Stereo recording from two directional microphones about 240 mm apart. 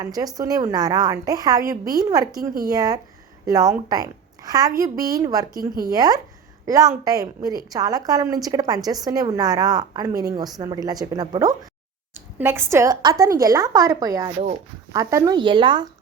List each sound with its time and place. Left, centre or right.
0.0 s a woman's voice: centre